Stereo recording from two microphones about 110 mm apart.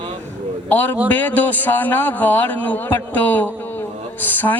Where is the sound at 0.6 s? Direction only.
15° left (ahead or behind).